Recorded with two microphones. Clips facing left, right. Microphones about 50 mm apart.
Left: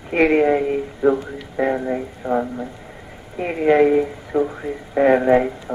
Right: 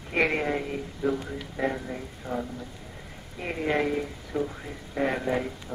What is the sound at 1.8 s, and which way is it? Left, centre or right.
Speech, left.